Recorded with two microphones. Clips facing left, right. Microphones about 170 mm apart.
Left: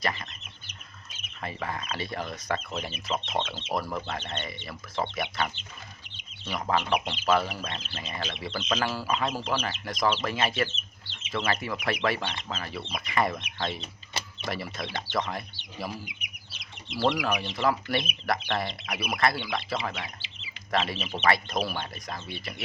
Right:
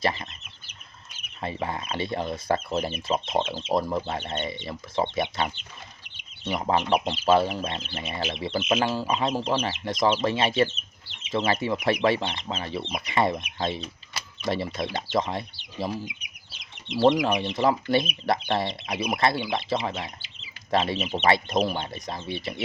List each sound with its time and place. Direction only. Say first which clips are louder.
0.0 s speech: right 5 dB; 25° right (ahead or behind)
1.4 s speech: right 4 dB; 25° right (ahead or behind)
16.9 s speech: right 6 dB; 20° right (ahead or behind)